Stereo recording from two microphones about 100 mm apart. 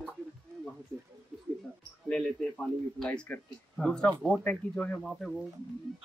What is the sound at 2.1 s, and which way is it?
A man's voice, 10° left (ahead or behind).